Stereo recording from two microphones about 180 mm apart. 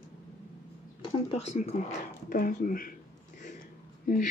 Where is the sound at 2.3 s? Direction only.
50° left (ahead or behind).